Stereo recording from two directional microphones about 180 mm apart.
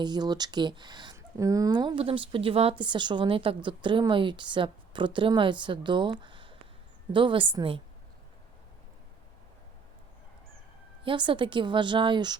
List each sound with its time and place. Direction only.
0.0 s speech: 25° right (ahead or behind)
11.0 s speech: 30° right (ahead or behind)